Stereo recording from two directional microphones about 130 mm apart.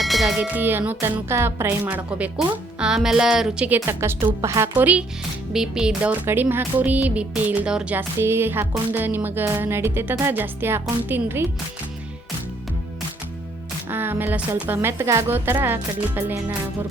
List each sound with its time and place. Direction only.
0.0 s a sound: centre (ahead or behind)
0.3 s speech: 15° right (ahead or behind)
3.8 s speech: 20° right (ahead or behind)
13.9 s speech: 15° right (ahead or behind)